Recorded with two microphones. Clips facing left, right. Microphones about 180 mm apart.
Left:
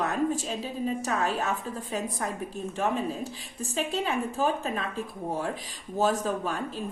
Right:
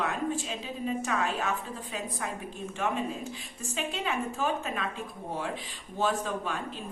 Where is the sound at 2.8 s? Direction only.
35° left (ahead or behind).